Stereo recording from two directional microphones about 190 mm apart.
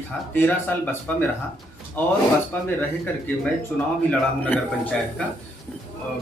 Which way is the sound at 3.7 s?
5° left (ahead or behind).